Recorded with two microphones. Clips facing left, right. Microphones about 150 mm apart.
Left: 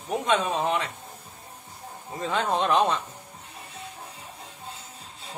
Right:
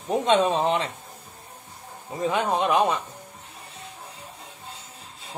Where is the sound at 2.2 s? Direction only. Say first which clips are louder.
Right 2 dB; 15° right (ahead or behind).